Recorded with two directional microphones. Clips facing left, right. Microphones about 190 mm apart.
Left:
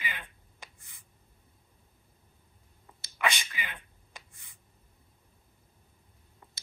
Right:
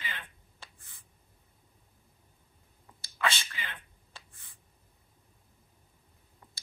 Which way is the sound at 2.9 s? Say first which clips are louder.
Left 1 dB; 15° left (ahead or behind).